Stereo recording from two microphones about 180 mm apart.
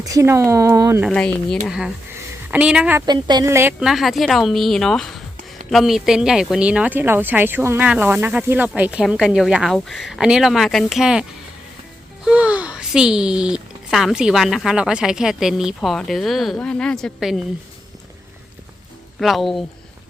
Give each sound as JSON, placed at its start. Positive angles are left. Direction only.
{"t": 0.0, "sound": "speech", "side_deg": -15}
{"t": 1.1, "sound": "speech", "side_deg": 5}
{"t": 3.1, "sound": "speech", "side_deg": -25}
{"t": 19.2, "sound": "speech", "side_deg": 0}